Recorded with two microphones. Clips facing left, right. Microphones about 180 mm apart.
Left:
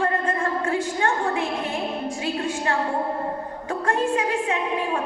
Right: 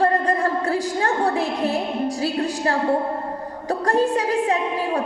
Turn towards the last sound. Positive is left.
turn(degrees=-35)  # may be behind; listen again after turning